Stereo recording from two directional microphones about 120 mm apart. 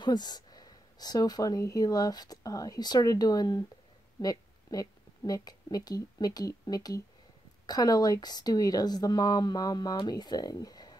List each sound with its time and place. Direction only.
0.0 s a woman's voice: 35° left (ahead or behind)